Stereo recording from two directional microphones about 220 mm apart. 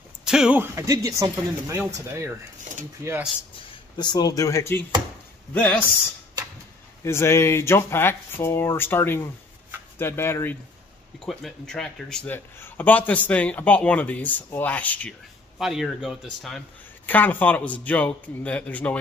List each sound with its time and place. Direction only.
0.2 s speech: 5° right (ahead or behind)
2.7 s a sound: 35° right (ahead or behind)
3.0 s speech: 10° right (ahead or behind)
3.9 s a man's voice: 20° left (ahead or behind)
7.1 s a man's voice: 10° left (ahead or behind)